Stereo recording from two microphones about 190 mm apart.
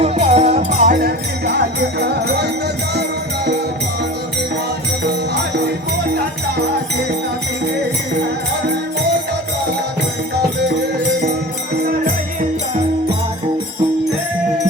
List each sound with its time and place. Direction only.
0.0 s music: 35° right (ahead or behind); by 2.5 s 60° right (ahead or behind)